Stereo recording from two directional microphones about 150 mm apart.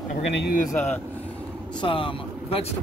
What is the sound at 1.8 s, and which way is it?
Speech, 35° left (ahead or behind).